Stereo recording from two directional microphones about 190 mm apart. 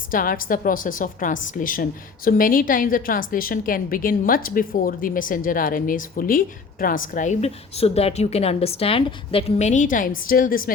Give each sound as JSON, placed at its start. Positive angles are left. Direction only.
{"t": 0.1, "sound": "a woman's voice", "side_deg": 45}